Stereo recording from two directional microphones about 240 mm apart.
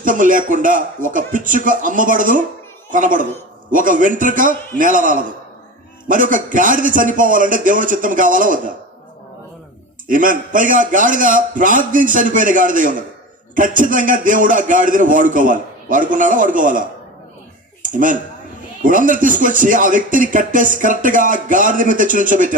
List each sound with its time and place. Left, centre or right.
0.0 s speech: right
10.1 s speech: right
17.8 s speech: right